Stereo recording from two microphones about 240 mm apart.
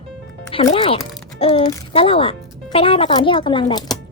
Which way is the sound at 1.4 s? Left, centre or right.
Left.